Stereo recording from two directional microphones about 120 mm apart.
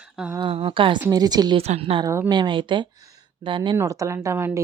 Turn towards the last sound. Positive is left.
turn(degrees=-20)  # may be behind; listen again after turning